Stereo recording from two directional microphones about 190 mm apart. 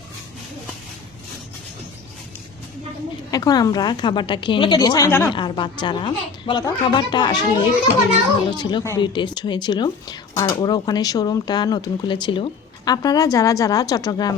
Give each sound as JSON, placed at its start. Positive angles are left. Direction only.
{"t": 3.3, "sound": "speech", "side_deg": 20}